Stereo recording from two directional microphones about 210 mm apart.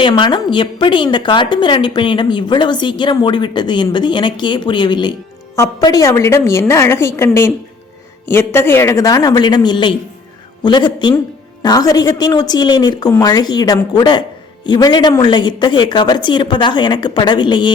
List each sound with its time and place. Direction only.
0.0 s a woman's voice: 20° left (ahead or behind)